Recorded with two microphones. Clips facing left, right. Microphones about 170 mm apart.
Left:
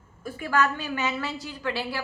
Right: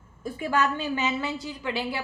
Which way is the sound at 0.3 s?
20° right (ahead or behind).